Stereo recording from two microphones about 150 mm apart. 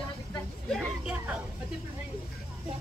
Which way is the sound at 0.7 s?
5° right (ahead or behind).